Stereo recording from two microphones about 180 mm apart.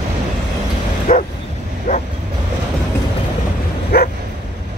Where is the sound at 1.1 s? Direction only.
35° left (ahead or behind).